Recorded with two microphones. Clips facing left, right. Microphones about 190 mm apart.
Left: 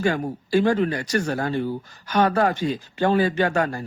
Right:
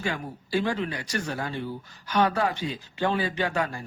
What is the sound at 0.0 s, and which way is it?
Speech, 45° left (ahead or behind).